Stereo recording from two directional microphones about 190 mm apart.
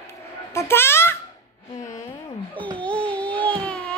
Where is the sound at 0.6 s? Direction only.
10° left (ahead or behind).